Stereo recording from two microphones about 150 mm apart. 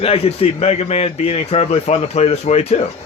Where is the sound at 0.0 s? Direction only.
40° left (ahead or behind).